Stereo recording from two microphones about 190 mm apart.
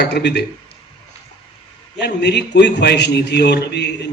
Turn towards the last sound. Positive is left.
turn(degrees=60)  # may be behind; listen again after turning